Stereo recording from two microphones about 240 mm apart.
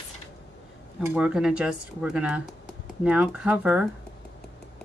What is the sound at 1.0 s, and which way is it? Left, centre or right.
Speech, centre.